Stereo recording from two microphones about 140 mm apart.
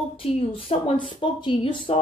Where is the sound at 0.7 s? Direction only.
50° left (ahead or behind).